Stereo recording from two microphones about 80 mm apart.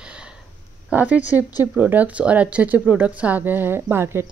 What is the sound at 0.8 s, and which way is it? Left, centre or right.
A woman's voice, centre.